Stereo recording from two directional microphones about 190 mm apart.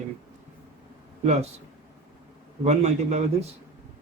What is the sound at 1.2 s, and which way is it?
Speech, 35° right (ahead or behind).